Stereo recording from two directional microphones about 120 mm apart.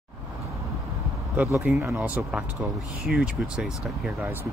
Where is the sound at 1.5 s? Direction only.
20° right (ahead or behind).